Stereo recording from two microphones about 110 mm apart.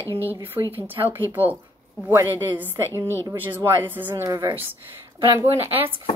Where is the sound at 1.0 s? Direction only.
35° right (ahead or behind).